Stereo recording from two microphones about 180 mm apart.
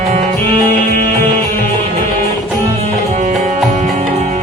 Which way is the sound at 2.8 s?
40° right (ahead or behind).